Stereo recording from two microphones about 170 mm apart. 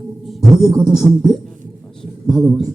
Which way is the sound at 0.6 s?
25° right (ahead or behind).